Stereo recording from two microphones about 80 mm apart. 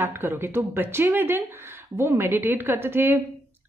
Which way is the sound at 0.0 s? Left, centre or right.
Right.